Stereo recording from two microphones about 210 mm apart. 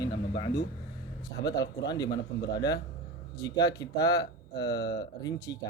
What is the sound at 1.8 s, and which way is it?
A man's voice, 20° left (ahead or behind).